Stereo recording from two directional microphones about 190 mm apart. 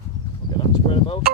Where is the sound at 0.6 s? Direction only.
30° left (ahead or behind).